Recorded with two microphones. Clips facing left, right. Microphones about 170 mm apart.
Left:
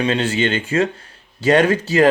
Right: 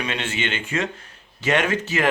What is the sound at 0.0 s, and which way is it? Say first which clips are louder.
Speech: left 9 dB; 35° left (ahead or behind).